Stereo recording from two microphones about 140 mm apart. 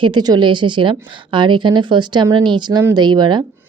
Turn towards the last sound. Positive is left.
turn(degrees=-30)  # may be behind; listen again after turning